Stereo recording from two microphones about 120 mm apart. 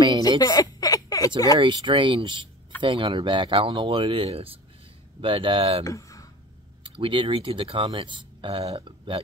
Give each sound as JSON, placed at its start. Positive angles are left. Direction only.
{"t": 0.4, "sound": "a sound", "side_deg": 30}
{"t": 1.6, "sound": "speech", "side_deg": -40}
{"t": 5.9, "sound": "speech", "side_deg": 25}
{"t": 6.8, "sound": "speech", "side_deg": -45}